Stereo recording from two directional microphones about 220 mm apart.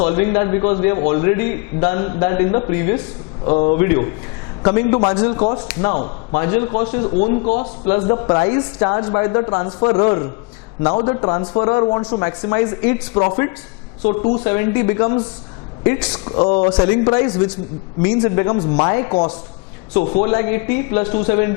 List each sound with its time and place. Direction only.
0.0 s a man's voice: 25° left (ahead or behind)
14.5 s a man's voice: 15° left (ahead or behind)
15.9 s speech: 10° left (ahead or behind)
16.2 s a man's voice: 25° left (ahead or behind)